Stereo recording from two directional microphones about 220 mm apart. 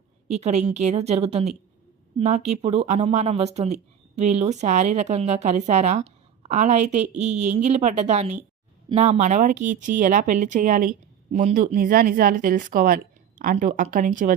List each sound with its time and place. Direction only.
0.3 s a woman's voice: 30° right (ahead or behind)